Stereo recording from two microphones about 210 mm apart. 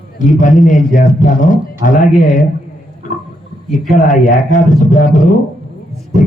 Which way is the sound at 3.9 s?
35° left (ahead or behind).